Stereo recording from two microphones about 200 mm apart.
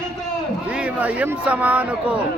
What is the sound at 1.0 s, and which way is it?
Speech, 5° right (ahead or behind).